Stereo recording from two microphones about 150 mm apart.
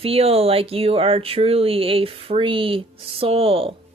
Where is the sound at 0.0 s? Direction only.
40° right (ahead or behind).